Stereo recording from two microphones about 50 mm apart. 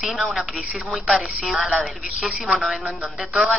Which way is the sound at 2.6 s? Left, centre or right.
Centre.